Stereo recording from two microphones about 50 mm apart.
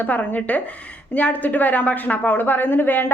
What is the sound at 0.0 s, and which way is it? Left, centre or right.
A woman's voice, left.